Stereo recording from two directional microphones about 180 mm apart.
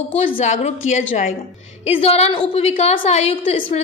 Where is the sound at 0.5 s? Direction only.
40° left (ahead or behind).